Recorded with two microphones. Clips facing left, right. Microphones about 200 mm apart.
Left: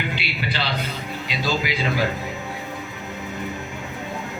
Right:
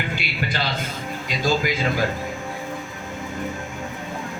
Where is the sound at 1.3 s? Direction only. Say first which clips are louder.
Right 3 dB; 45° right (ahead or behind).